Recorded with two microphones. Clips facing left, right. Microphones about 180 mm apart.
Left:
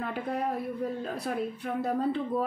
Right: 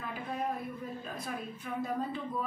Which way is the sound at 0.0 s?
70° left (ahead or behind).